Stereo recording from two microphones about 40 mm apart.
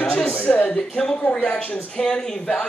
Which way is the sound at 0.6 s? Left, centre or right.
Left.